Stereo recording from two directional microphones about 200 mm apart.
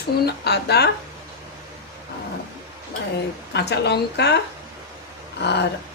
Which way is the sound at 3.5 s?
55° left (ahead or behind).